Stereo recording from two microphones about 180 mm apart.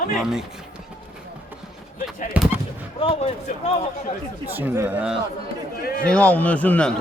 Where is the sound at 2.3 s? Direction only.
10° right (ahead or behind).